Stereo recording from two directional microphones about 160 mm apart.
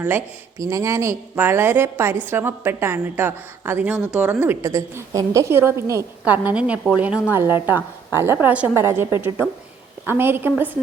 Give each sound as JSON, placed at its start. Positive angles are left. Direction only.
{"t": 0.6, "sound": "a woman's voice", "side_deg": -20}